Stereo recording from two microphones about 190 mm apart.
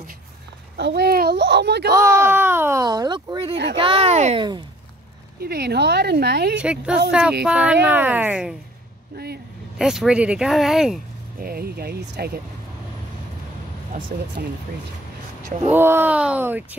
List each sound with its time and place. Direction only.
0.7 s speech: 60° right (ahead or behind)
2.0 s speech: 15° right (ahead or behind); by 4.5 s 35° right (ahead or behind)
5.4 s speech: 55° right (ahead or behind)
6.6 s speech: 5° right (ahead or behind)
9.1 s speech: 55° right (ahead or behind)
9.8 s speech: centre (ahead or behind)
11.3 s speech: 50° right (ahead or behind)
15.7 s speech: 10° right (ahead or behind)